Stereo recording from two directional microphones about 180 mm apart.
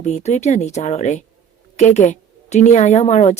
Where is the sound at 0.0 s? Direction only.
40° left (ahead or behind).